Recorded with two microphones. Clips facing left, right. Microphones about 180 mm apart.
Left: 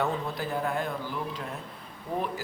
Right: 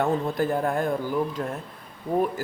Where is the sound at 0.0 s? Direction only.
50° right (ahead or behind).